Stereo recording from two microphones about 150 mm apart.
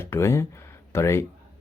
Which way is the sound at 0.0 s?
15° left (ahead or behind).